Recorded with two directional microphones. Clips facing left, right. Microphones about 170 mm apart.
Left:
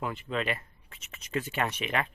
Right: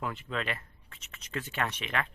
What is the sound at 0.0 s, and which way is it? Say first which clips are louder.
A man's voice: left 3 dB; 5° left (ahead or behind).